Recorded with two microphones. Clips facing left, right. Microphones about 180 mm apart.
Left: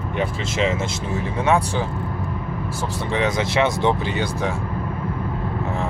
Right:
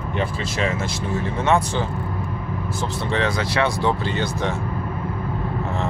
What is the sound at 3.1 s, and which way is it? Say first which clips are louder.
Speech: left 2 dB; 20° left (ahead or behind).